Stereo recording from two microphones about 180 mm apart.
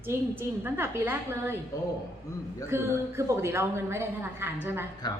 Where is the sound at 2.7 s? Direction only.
15° right (ahead or behind).